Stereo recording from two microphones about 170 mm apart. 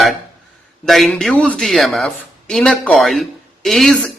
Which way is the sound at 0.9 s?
Centre (ahead or behind).